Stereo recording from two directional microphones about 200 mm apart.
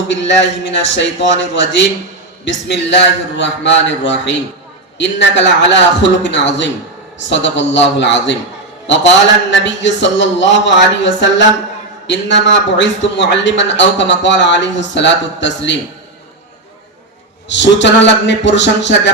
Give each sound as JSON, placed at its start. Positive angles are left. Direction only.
{"t": 0.1, "sound": "a man's voice", "side_deg": 65}
{"t": 9.5, "sound": "a man's voice", "side_deg": 60}
{"t": 17.5, "sound": "a man's voice", "side_deg": 65}